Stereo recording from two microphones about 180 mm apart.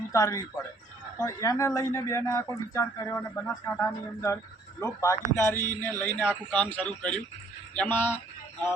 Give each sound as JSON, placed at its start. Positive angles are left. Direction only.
{"t": 0.1, "sound": "speech", "side_deg": 20}